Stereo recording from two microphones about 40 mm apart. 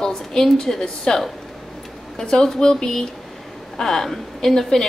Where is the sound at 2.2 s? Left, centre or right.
Centre.